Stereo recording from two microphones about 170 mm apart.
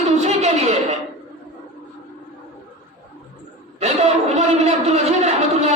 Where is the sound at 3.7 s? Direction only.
40° right (ahead or behind).